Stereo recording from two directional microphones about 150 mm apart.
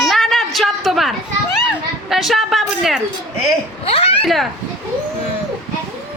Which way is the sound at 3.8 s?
40° left (ahead or behind).